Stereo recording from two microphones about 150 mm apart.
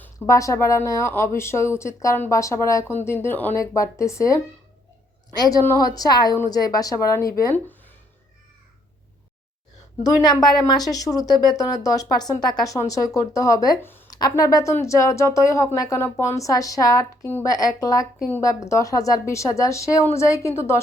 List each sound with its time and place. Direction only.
0.0 s speech: 20° left (ahead or behind)
5.4 s speech: 25° left (ahead or behind)
10.0 s speech: 25° left (ahead or behind)